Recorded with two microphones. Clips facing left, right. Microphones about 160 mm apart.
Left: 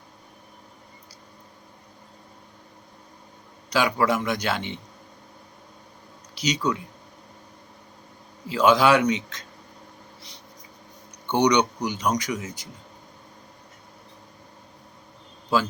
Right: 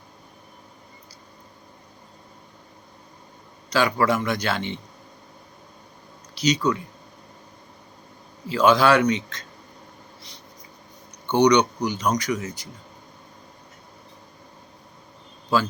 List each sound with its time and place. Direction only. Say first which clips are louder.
3.7 s speech: right 1 dB; 15° left (ahead or behind)
6.3 s speech: right 3 dB; 15° left (ahead or behind)
8.4 s speech: right 1 dB; 15° left (ahead or behind)
11.3 s speech: right 3 dB; 15° left (ahead or behind)